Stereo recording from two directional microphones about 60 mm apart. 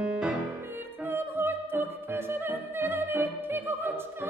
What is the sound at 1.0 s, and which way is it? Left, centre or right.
Opera, right.